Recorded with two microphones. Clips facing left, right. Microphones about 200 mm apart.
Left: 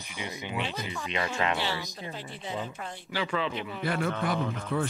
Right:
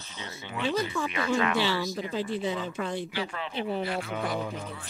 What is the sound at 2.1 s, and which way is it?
Speech, 90° right.